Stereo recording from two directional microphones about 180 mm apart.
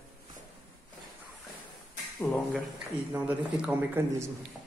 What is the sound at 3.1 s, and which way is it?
Speech, 10° right (ahead or behind).